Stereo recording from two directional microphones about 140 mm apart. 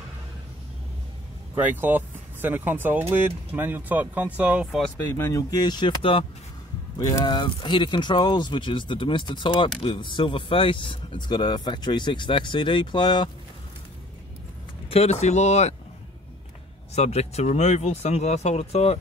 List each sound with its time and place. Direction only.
1.5 s speech: 15° right (ahead or behind)
5.0 s speech: 15° left (ahead or behind); by 13.3 s 35° left (ahead or behind)
14.9 s speech: 50° left (ahead or behind)
16.9 s speech: 50° left (ahead or behind)